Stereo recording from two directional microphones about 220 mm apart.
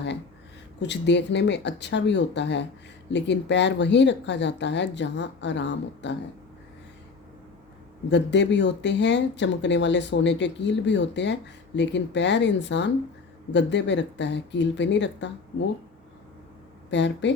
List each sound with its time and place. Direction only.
0.8 s speech: 50° left (ahead or behind)
8.1 s speech: 55° left (ahead or behind)
16.9 s speech: 55° left (ahead or behind)